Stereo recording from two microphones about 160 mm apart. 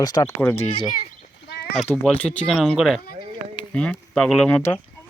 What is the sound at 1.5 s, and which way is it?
Sheep, 90° left.